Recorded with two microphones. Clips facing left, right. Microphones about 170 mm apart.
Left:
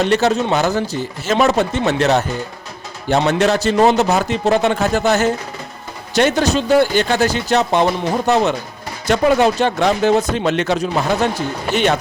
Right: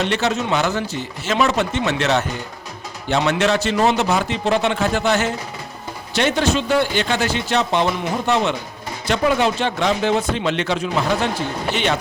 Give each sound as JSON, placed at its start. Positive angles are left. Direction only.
{"t": 0.0, "sound": "speech", "side_deg": 40}
{"t": 9.0, "sound": "speech", "side_deg": 45}